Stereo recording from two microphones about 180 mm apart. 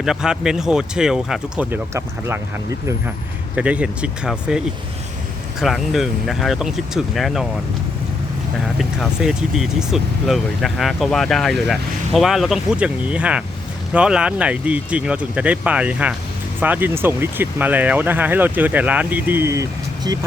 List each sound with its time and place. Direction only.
0.0 s speech: 5° right (ahead or behind)
3.5 s speech: 5° right (ahead or behind)
8.8 s speech: centre (ahead or behind); by 20.2 s 20° right (ahead or behind)